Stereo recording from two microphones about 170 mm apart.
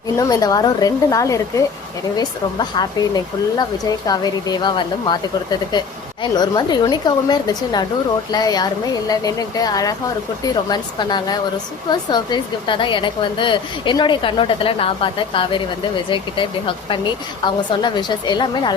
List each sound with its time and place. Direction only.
0.2 s a woman's voice: 20° left (ahead or behind)